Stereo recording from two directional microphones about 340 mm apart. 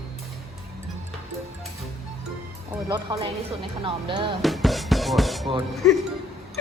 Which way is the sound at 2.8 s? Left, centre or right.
Centre.